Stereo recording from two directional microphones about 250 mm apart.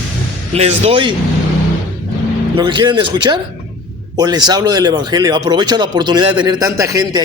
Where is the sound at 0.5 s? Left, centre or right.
Right.